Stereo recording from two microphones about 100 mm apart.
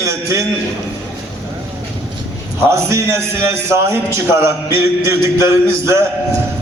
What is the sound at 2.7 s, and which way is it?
A man's voice, 30° right (ahead or behind).